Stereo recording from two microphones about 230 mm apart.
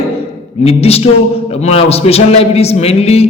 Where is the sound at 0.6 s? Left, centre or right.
Left.